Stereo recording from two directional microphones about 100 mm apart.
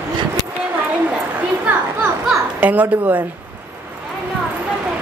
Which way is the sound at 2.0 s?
15° right (ahead or behind).